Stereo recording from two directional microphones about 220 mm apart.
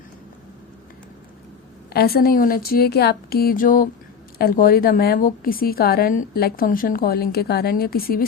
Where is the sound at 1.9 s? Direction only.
45° left (ahead or behind).